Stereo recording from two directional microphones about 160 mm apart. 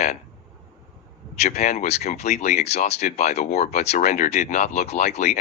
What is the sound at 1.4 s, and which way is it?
Speech, 45° left (ahead or behind).